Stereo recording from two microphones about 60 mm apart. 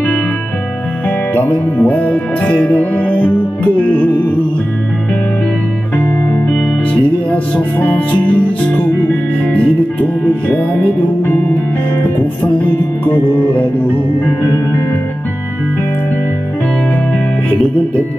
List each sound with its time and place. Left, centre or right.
1.3 s music: left
9.5 s music: left